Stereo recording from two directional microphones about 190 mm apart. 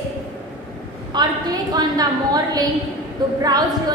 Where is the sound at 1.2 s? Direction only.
25° right (ahead or behind).